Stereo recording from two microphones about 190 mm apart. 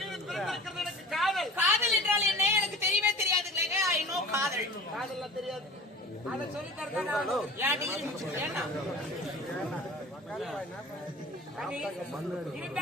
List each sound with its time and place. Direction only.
0.0 s a sound: centre (ahead or behind)
1.5 s a sound: 10° right (ahead or behind)
6.7 s speech: centre (ahead or behind)
7.6 s speech: 10° right (ahead or behind)
10.3 s speech: centre (ahead or behind)
11.6 s speech: centre (ahead or behind)